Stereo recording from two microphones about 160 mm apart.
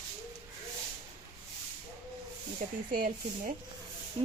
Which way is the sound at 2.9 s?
60° right (ahead or behind).